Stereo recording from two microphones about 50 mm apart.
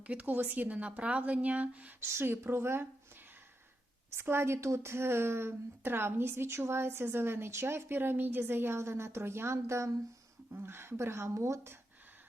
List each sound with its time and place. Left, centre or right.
0.0 s speech: right
2.0 s speech: right
4.1 s a woman's voice: right
10.5 s speech: right